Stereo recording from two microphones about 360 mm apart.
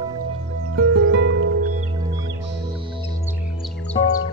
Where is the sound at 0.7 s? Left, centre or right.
Right.